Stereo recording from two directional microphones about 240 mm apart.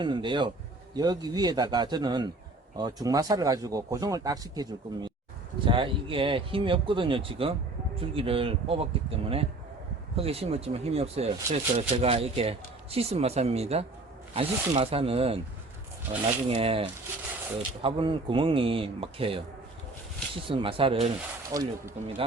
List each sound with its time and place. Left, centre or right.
0.0 s speech: centre